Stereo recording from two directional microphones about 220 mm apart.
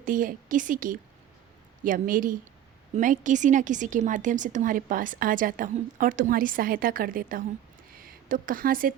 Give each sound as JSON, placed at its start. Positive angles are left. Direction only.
{"t": 0.0, "sound": "a woman's voice", "side_deg": -40}